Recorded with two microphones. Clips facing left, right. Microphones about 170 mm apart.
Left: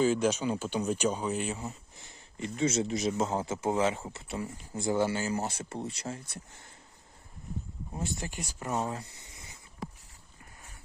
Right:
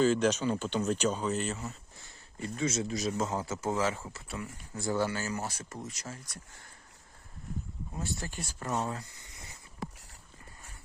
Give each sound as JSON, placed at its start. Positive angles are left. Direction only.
{"t": 0.0, "sound": "speech", "side_deg": 10}
{"t": 7.9, "sound": "speech", "side_deg": 20}
{"t": 9.0, "sound": "a sound", "side_deg": 25}